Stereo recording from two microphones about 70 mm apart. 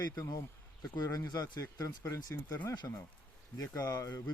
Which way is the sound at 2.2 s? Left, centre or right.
Left.